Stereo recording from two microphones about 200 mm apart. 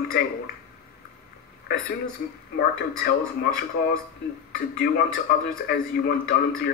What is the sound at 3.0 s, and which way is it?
Speech, 45° left (ahead or behind).